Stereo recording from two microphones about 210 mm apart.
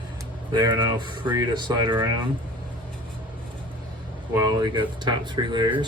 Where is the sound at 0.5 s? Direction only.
20° right (ahead or behind).